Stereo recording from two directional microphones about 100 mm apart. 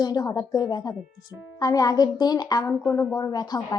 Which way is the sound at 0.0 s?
45° left (ahead or behind).